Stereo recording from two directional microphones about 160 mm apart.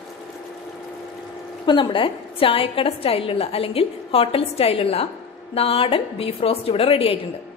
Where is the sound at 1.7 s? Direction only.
30° left (ahead or behind).